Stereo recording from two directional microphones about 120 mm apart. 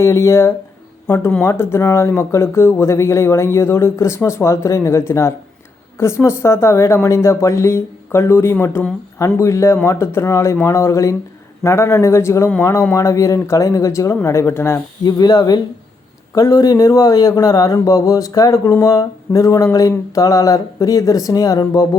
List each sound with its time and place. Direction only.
0.0 s speech: 25° left (ahead or behind)
15.0 s speech: 35° left (ahead or behind)